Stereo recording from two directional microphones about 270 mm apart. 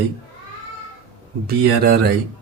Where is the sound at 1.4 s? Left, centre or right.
Right.